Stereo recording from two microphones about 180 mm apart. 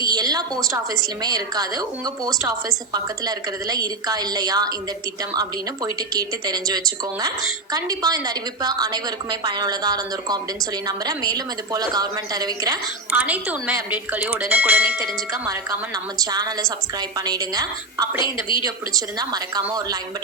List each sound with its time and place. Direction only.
0.0 s a woman's voice: 20° right (ahead or behind)
13.1 s a woman's voice: 10° right (ahead or behind)
16.1 s a woman's voice: 20° right (ahead or behind)
18.2 s a woman's voice: 25° left (ahead or behind)
18.6 s a woman's voice: 20° right (ahead or behind)